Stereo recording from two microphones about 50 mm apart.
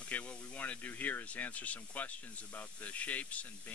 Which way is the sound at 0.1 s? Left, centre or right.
Left.